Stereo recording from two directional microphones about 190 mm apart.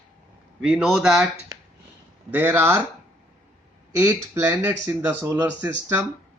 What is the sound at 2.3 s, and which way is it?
Speech, 10° right (ahead or behind).